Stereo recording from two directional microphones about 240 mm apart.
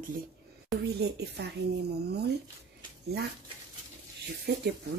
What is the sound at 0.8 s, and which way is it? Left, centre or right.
Speech, right.